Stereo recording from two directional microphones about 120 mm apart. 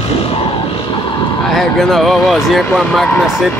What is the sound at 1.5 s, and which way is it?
Speech, centre (ahead or behind).